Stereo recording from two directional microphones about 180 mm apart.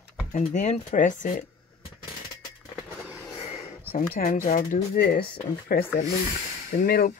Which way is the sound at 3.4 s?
35° left (ahead or behind).